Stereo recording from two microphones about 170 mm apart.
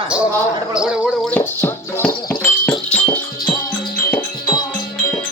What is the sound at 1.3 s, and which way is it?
Music, 10° left (ahead or behind).